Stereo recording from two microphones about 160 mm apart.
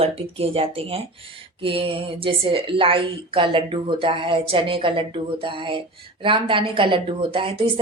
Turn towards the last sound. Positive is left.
turn(degrees=-35)  # may be behind; listen again after turning